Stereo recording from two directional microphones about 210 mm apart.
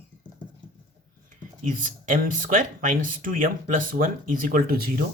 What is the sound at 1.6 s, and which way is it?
Speech, 40° right (ahead or behind).